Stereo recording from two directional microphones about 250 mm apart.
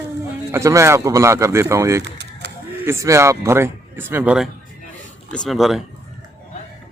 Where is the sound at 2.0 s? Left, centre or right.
Right.